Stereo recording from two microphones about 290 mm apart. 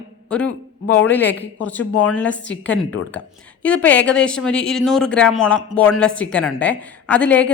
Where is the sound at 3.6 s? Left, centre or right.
Centre.